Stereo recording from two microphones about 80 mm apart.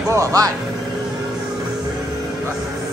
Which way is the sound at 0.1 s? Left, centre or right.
Right.